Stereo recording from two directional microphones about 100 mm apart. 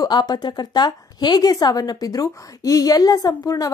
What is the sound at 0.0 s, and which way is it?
A woman's voice, 45° left (ahead or behind).